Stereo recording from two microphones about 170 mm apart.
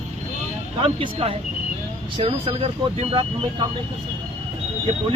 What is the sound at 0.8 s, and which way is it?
Speech, 30° right (ahead or behind).